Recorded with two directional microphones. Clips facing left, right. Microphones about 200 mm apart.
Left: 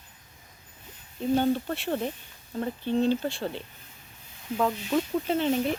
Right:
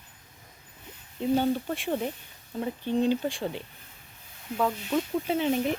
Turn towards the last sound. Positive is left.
turn(degrees=-10)  # may be behind; listen again after turning